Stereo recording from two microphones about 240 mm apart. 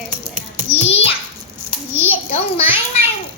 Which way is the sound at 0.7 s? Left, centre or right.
Left.